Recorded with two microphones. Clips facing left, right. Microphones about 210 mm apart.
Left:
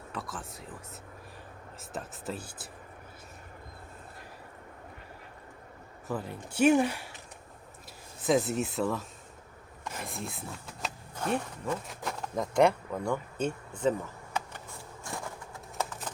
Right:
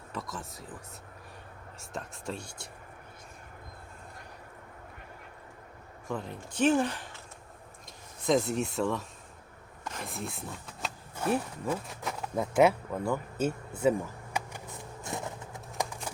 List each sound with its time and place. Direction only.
0.1 s speech: centre (ahead or behind)
1.8 s speech: 5° left (ahead or behind)
6.1 s speech: 5° left (ahead or behind)
8.2 s speech: 5° left (ahead or behind)
14.3 s a sound: 15° right (ahead or behind)